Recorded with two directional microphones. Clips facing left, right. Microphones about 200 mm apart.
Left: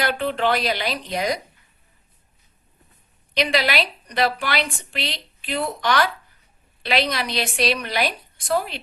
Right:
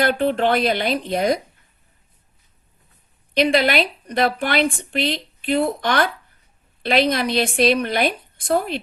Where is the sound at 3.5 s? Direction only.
50° right (ahead or behind).